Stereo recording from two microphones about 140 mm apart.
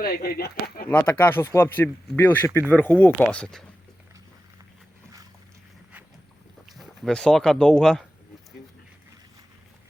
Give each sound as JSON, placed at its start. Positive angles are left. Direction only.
{"t": 0.0, "sound": "speech", "side_deg": 90}
{"t": 0.9, "sound": "speech", "side_deg": 15}
{"t": 6.7, "sound": "speech", "side_deg": 0}